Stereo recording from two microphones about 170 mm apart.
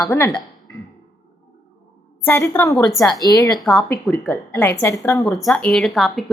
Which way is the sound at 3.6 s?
Centre (ahead or behind).